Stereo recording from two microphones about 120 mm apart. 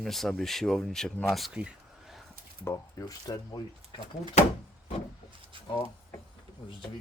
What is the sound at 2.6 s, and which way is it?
Speech, 30° left (ahead or behind).